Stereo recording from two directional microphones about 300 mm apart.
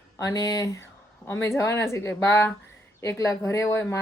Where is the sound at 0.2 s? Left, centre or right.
Centre.